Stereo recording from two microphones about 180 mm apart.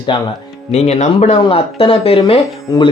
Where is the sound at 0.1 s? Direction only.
25° left (ahead or behind).